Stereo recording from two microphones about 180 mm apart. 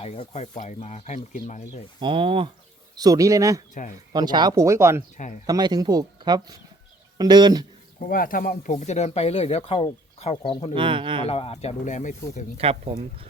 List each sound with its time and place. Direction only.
0.0 s speech: 35° left (ahead or behind)
2.0 s speech: 30° right (ahead or behind)
5.1 s speech: 45° left (ahead or behind)
5.5 s speech: 20° right (ahead or behind)
7.9 s speech: 50° left (ahead or behind); by 10.7 s 30° left (ahead or behind)
10.8 s speech: 30° right (ahead or behind)
11.3 s speech: 35° left (ahead or behind)
12.5 s speech: 35° right (ahead or behind)